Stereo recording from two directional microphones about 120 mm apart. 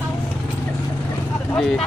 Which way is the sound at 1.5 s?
5° left (ahead or behind).